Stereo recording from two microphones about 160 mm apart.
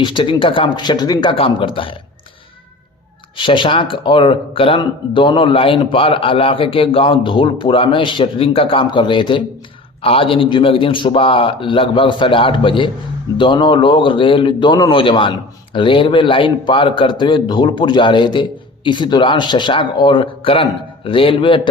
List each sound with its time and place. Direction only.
0.0 s speech: 30° left (ahead or behind)
3.3 s speech: 30° left (ahead or behind)